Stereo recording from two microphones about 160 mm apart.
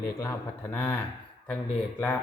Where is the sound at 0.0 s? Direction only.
15° left (ahead or behind).